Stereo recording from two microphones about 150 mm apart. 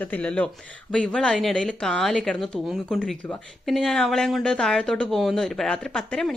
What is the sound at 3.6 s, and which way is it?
Speech, centre (ahead or behind).